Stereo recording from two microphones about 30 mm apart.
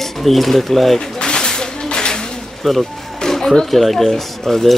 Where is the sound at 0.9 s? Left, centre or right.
Left.